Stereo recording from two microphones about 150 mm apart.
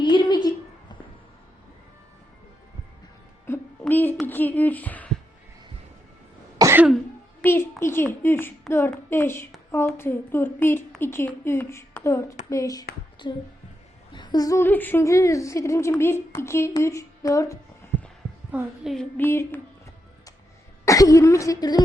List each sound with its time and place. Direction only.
0.0 s a sound: 30° left (ahead or behind)
3.4 s a sound: 15° left (ahead or behind)
4.3 s a woman's voice: 10° left (ahead or behind)
6.6 s throat clearing: 20° right (ahead or behind)
7.4 s a woman's voice: 15° left (ahead or behind)
18.5 s speech: 10° right (ahead or behind)
19.1 s a woman's voice: 15° left (ahead or behind)
20.8 s speech: 25° left (ahead or behind)